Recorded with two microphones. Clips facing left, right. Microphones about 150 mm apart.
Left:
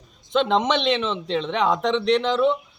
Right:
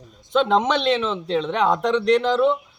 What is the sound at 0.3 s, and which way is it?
Speech, 45° right (ahead or behind).